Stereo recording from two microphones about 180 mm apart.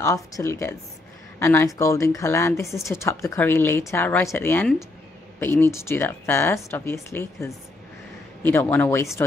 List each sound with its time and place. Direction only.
0.0 s speech: 15° left (ahead or behind)